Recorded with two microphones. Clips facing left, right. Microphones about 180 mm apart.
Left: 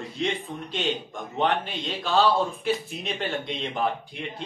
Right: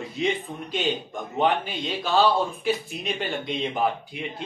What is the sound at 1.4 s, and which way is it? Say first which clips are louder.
Speech: right 2 dB; 5° right (ahead or behind).